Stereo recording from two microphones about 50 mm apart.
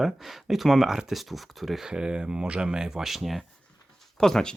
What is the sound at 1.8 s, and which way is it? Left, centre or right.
Speech, centre.